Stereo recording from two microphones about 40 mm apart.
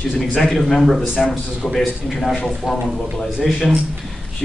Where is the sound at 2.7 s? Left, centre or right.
Centre.